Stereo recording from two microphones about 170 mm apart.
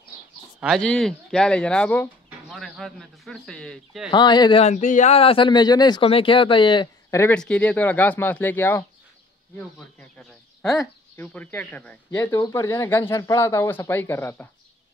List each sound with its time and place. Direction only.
0.6 s a man's voice: centre (ahead or behind)
4.1 s speech: 25° left (ahead or behind)
4.6 s speech: 45° left (ahead or behind); by 7.3 s 15° left (ahead or behind)
7.3 s speech: 5° left (ahead or behind)
9.9 s speech: 5° left (ahead or behind)
12.3 s speech: 20° left (ahead or behind)